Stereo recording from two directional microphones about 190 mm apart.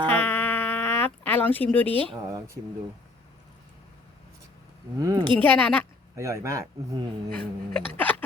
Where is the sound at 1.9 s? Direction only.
30° right (ahead or behind).